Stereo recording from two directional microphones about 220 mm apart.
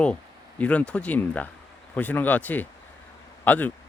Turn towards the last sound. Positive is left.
turn(degrees=5)  # may be behind; listen again after turning